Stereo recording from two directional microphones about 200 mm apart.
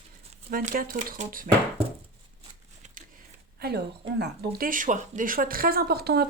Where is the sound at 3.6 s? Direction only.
55° right (ahead or behind).